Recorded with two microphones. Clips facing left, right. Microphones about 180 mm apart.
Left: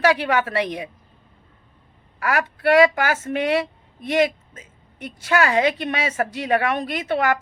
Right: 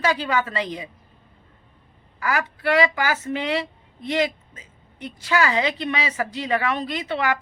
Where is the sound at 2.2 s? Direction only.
60° left (ahead or behind).